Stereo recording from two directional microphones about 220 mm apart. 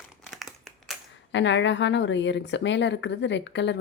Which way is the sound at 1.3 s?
55° left (ahead or behind).